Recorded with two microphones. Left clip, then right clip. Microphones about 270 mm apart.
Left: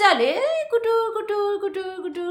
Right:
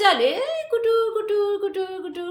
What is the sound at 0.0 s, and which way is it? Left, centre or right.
A woman's voice, centre.